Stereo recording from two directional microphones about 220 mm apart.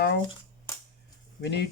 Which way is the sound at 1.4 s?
50° left (ahead or behind).